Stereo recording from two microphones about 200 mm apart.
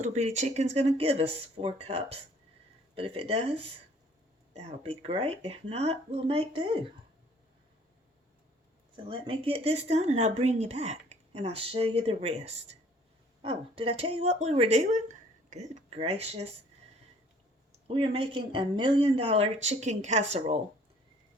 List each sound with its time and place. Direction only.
0.0 s speech: 35° right (ahead or behind)
9.0 s speech: 25° right (ahead or behind)
17.8 s speech: 30° right (ahead or behind)